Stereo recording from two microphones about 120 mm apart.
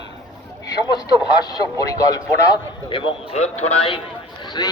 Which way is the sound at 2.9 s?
55° left (ahead or behind).